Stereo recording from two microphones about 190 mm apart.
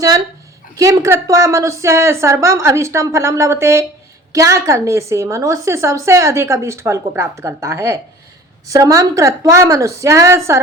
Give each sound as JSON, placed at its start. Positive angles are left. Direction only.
{"t": 0.8, "sound": "a woman's voice", "side_deg": -15}